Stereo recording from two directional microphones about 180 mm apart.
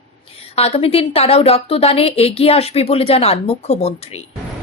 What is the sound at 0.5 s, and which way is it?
A woman's voice, 35° left (ahead or behind).